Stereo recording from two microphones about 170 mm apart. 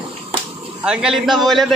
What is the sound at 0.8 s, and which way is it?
Speech, centre (ahead or behind).